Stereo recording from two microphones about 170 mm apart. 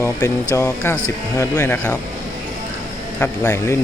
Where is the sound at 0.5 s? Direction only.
15° left (ahead or behind).